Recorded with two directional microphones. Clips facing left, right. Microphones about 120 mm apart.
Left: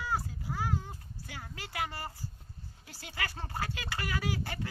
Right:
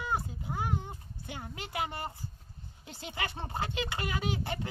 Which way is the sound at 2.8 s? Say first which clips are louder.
Right 2 dB; 20° right (ahead or behind).